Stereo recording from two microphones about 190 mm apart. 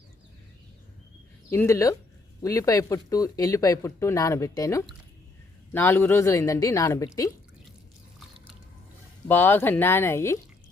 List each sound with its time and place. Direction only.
1.5 s speech: 15° left (ahead or behind)
9.2 s speech: 10° left (ahead or behind)